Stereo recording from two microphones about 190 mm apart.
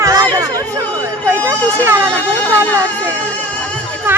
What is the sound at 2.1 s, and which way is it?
Speech, 10° left (ahead or behind).